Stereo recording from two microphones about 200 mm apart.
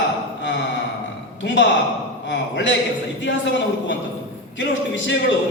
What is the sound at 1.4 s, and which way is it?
A man's voice, 65° left (ahead or behind).